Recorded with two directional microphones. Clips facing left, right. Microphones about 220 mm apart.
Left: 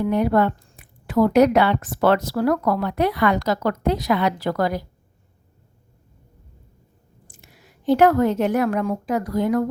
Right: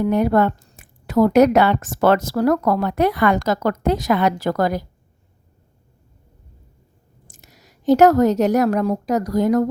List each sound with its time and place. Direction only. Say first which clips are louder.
0.0 s a woman's voice: right 2 dB; 45° right (ahead or behind)
7.4 s a woman's voice: right 3 dB; 40° right (ahead or behind)